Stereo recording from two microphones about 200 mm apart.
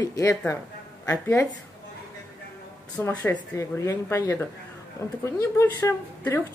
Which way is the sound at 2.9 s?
10° left (ahead or behind).